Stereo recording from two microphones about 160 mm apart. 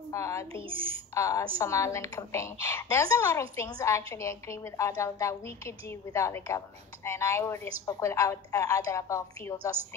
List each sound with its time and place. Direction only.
0.1 s a woman's voice: 20° left (ahead or behind)
0.5 s speech: 35° right (ahead or behind)
1.1 s a woman's voice: 20° left (ahead or behind)